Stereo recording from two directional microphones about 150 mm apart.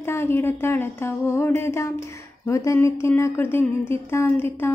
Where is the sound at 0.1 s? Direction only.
15° left (ahead or behind).